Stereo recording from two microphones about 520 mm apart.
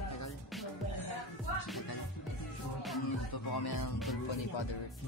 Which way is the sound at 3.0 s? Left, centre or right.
Left.